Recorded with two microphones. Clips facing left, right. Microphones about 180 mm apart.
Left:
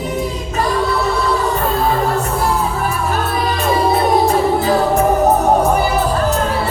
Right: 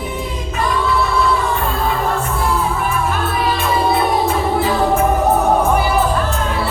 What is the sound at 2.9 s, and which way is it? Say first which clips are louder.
Music: even; 40° left (ahead or behind).